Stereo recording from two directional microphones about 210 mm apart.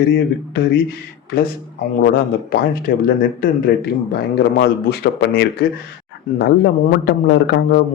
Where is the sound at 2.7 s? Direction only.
45° left (ahead or behind).